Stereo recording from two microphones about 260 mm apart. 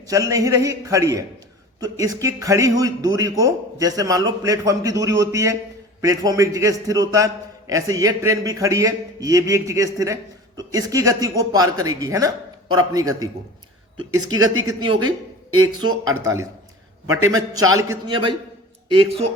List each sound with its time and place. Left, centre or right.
0.1 s a man's voice: centre
14.3 s speech: right
14.7 s a man's voice: centre
15.4 s speech: right
15.8 s a man's voice: centre